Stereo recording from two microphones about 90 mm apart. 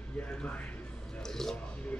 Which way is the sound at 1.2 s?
5° left (ahead or behind).